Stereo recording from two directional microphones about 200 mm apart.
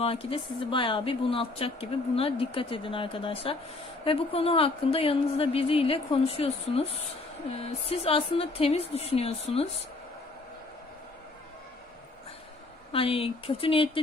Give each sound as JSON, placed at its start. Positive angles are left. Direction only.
{"t": 0.0, "sound": "speech", "side_deg": 30}
{"t": 12.9, "sound": "speech", "side_deg": 30}